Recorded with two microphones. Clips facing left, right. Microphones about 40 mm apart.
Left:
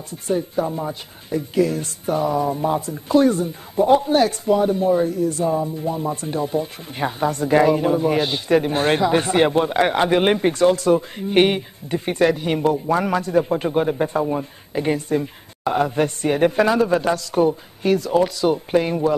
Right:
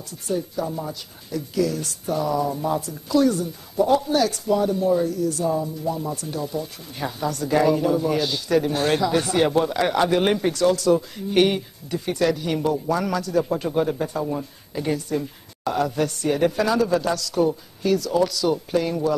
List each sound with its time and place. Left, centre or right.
0.1 s speech: left